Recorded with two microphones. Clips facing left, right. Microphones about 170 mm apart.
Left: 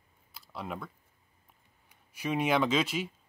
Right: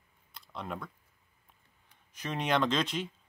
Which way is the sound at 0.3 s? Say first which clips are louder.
Left 1 dB; 5° left (ahead or behind).